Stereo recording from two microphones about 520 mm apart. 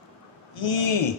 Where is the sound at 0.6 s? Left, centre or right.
Left.